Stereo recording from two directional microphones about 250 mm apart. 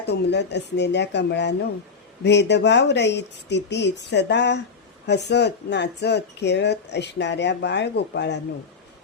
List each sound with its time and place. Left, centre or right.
0.0 s speech: left